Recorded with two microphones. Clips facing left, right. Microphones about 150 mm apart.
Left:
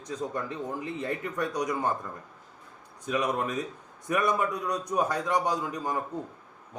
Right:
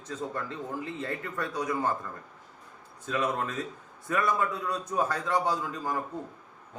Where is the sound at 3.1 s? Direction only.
15° left (ahead or behind).